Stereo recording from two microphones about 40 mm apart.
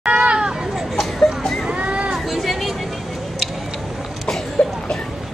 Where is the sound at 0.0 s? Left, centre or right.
Right.